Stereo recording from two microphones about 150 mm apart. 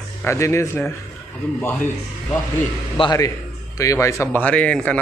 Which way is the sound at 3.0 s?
25° left (ahead or behind).